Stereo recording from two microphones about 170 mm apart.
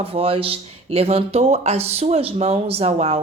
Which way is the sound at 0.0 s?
35° right (ahead or behind).